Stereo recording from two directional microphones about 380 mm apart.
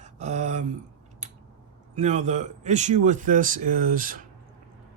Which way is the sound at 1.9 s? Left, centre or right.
Centre.